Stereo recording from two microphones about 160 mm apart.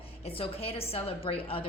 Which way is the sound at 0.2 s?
35° left (ahead or behind).